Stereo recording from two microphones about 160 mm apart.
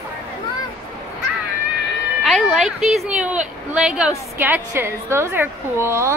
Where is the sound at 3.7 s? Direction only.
5° right (ahead or behind).